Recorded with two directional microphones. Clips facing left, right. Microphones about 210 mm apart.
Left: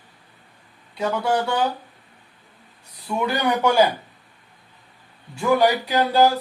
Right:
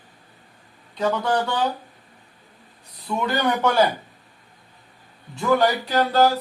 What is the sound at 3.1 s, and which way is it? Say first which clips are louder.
Speech: left 1 dB; 10° left (ahead or behind).